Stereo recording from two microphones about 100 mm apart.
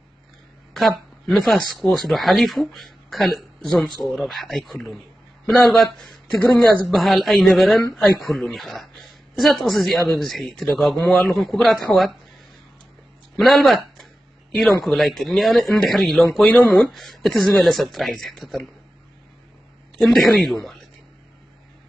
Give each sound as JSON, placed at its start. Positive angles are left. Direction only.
{"t": 0.7, "sound": "speech", "side_deg": 0}
{"t": 13.4, "sound": "speech", "side_deg": 0}
{"t": 20.0, "sound": "speech", "side_deg": 0}